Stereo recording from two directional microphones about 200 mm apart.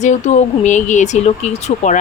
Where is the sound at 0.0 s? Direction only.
35° left (ahead or behind).